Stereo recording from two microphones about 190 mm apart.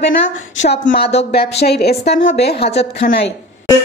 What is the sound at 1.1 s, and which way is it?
A woman's voice, 55° left (ahead or behind).